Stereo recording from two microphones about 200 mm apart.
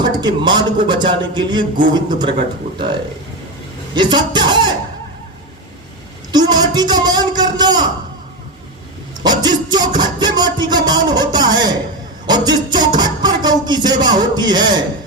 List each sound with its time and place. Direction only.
0.0 s a man's voice: 20° right (ahead or behind)
3.9 s a man's voice: 20° right (ahead or behind)
6.3 s a man's voice: 20° right (ahead or behind)
9.2 s music: 20° right (ahead or behind)
12.2 s speech: 20° right (ahead or behind)